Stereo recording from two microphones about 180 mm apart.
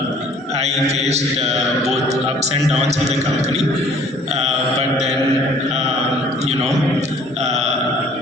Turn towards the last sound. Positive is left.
turn(degrees=-40)  # may be behind; listen again after turning